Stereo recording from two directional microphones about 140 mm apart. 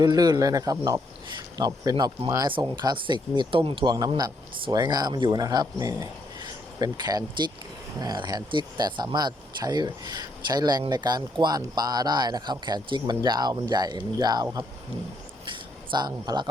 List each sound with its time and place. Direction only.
0.0 s speech: 30° right (ahead or behind)
15.4 s speech: 35° right (ahead or behind)